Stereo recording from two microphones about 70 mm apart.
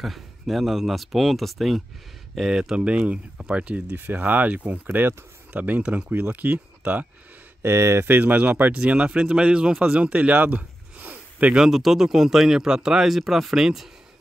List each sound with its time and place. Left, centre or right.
0.0 s speech: centre
3.9 s a man's voice: right
5.5 s speech: centre
6.0 s a man's voice: right
7.6 s speech: right
8.2 s a man's voice: right
11.6 s speech: centre